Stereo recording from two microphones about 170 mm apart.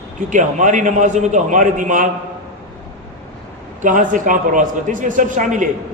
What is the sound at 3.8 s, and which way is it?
A man's voice, 50° right (ahead or behind).